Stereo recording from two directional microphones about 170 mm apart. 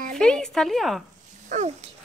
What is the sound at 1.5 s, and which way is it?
Speech, 45° right (ahead or behind).